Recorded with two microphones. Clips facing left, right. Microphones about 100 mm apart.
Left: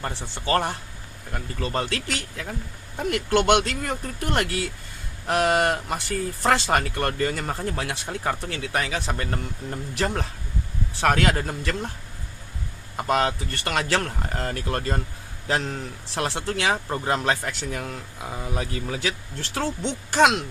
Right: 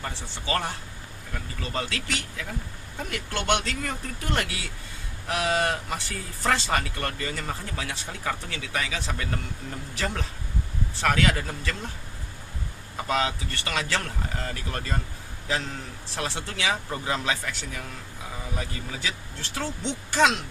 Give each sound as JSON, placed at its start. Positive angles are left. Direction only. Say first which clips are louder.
{"t": 0.0, "sound": "speech", "louder": "left 4 dB", "side_deg": 50}
{"t": 3.1, "sound": "speech", "louder": "left 7 dB", "side_deg": 70}
{"t": 11.0, "sound": "speech", "louder": "left 3 dB", "side_deg": 50}
{"t": 13.0, "sound": "speech", "louder": "left 4 dB", "side_deg": 55}